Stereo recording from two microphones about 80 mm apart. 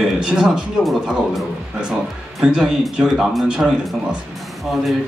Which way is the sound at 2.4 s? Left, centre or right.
Centre.